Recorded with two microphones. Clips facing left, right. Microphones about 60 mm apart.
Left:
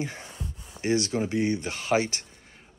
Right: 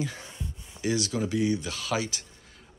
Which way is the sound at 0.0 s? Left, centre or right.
Left.